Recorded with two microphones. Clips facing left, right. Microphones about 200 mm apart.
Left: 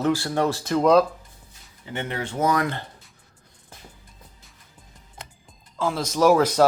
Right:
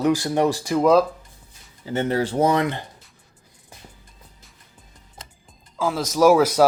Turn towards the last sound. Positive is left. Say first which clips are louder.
# right 2 dB
turn(degrees=-10)  # may be behind; listen again after turning